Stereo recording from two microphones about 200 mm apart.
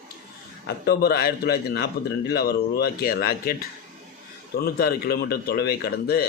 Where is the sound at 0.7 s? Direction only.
50° left (ahead or behind).